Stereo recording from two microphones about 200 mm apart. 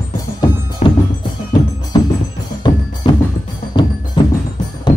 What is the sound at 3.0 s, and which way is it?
Percussion, 25° left (ahead or behind).